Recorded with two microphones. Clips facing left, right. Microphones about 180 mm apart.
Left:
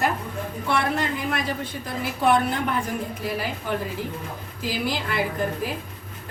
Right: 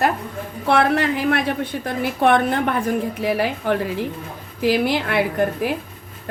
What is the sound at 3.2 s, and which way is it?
A woman's voice, 70° right (ahead or behind).